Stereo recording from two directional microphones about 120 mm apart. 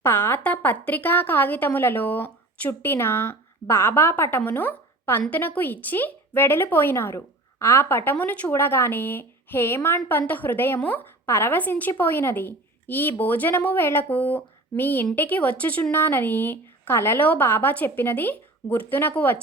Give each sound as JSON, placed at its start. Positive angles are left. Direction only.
{"t": 0.0, "sound": "speech", "side_deg": 20}